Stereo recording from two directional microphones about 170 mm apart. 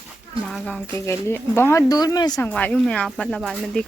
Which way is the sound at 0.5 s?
5° left (ahead or behind).